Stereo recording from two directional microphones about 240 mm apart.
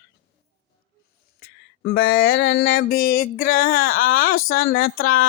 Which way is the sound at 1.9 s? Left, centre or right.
Left.